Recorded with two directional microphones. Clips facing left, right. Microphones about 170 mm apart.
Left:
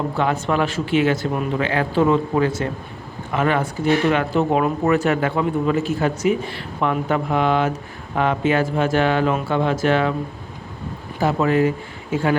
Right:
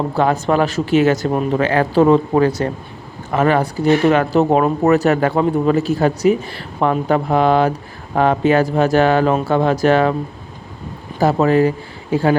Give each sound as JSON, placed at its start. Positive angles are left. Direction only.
{"t": 0.2, "sound": "speech", "side_deg": -40}
{"t": 11.2, "sound": "speech", "side_deg": -40}